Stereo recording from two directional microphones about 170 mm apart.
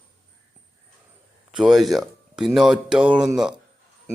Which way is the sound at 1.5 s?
Centre (ahead or behind).